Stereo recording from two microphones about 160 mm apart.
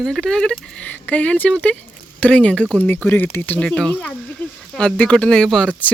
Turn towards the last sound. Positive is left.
turn(degrees=5)  # may be behind; listen again after turning